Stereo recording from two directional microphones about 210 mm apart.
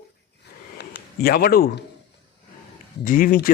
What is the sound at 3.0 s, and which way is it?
Speech, 40° left (ahead or behind).